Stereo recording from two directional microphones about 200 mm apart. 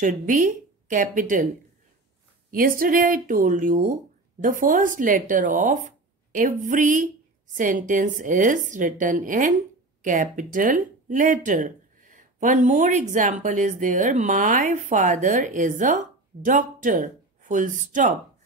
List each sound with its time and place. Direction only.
0.0 s speech: 40° right (ahead or behind)
2.5 s a woman's voice: 45° right (ahead or behind)